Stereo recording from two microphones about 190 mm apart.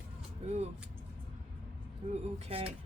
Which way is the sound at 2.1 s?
35° right (ahead or behind).